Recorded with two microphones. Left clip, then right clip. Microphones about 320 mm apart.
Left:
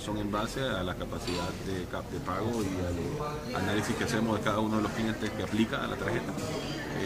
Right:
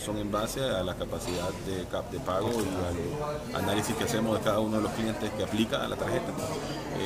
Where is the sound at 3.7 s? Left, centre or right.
Centre.